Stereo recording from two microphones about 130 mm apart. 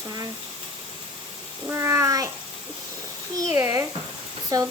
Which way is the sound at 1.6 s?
20° right (ahead or behind).